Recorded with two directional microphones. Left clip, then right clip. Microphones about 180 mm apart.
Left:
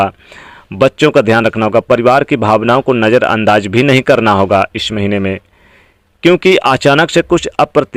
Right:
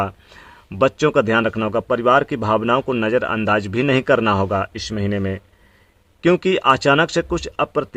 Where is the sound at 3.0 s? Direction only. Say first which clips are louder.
Left 9 dB; 30° left (ahead or behind).